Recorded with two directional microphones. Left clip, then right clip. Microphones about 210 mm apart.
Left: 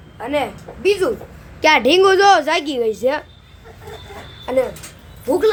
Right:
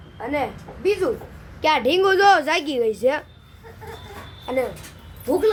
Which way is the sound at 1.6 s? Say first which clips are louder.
Left 6 dB; 30° left (ahead or behind).